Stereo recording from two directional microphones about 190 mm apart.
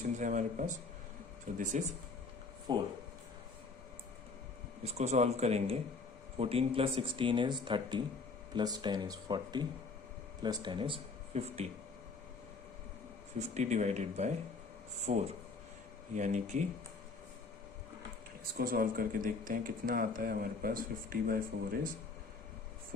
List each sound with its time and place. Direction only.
0.2 s speech: 40° right (ahead or behind)
2.7 s speech: 25° right (ahead or behind)
4.9 s speech: 35° right (ahead or behind)
13.4 s speech: 35° right (ahead or behind)
18.5 s speech: 50° right (ahead or behind)